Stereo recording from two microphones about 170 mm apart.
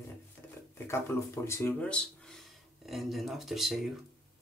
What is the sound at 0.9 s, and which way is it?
Speech, 15° left (ahead or behind).